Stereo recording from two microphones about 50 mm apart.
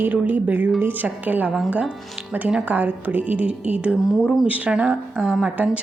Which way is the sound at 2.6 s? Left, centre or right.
Right.